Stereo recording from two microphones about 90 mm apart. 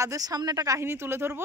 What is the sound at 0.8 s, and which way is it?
Speech, 25° right (ahead or behind).